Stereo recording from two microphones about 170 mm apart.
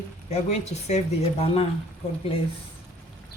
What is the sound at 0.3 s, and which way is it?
Speech, 40° left (ahead or behind).